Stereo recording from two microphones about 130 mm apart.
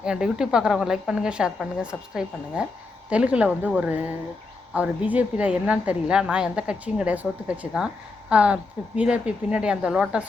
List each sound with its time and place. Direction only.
0.0 s a woman's voice: 5° right (ahead or behind)